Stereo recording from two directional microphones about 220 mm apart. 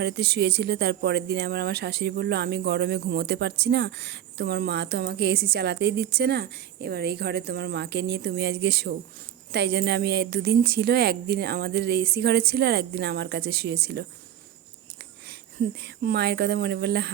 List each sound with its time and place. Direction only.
0.0 s speech: 50° right (ahead or behind)
15.8 s speech: 45° right (ahead or behind)